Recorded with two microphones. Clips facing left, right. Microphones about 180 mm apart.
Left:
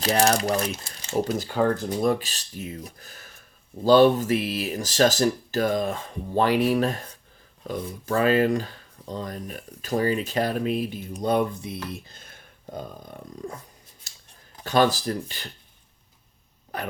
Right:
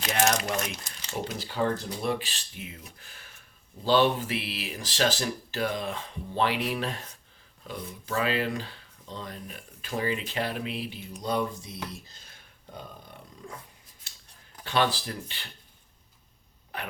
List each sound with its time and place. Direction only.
0.0 s speech: 35° left (ahead or behind); by 12.3 s 55° left (ahead or behind)
12.7 s speech: 45° left (ahead or behind)
14.0 s scissors: 40° left (ahead or behind)
14.6 s speech: 40° left (ahead or behind)
16.7 s speech: 40° left (ahead or behind)